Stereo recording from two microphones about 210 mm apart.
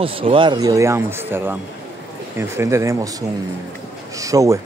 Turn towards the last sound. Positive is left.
turn(degrees=-15)  # may be behind; listen again after turning